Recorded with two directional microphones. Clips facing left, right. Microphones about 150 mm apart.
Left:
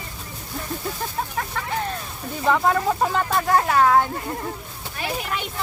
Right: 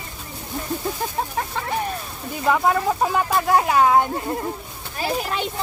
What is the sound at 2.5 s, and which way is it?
Speech, 5° right (ahead or behind).